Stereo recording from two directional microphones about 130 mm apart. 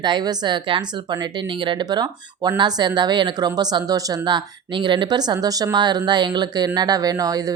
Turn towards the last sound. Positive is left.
turn(degrees=-30)  # may be behind; listen again after turning